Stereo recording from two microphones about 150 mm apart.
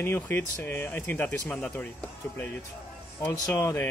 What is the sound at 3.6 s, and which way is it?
Speech, 15° left (ahead or behind).